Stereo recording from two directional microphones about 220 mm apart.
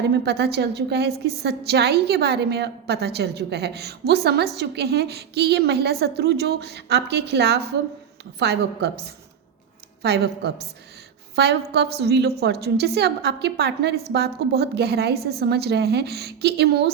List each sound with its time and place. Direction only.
0.1 s a woman's voice: 50° right (ahead or behind)